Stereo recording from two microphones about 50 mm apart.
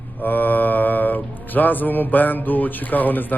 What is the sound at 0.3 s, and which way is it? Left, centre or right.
Speech, left.